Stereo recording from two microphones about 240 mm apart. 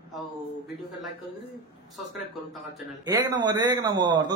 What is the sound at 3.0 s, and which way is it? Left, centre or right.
Speech, centre.